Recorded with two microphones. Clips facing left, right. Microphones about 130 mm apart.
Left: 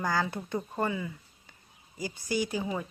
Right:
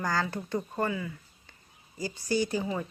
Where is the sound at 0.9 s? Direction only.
20° left (ahead or behind).